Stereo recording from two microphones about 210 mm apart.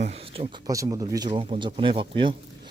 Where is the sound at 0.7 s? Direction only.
15° right (ahead or behind).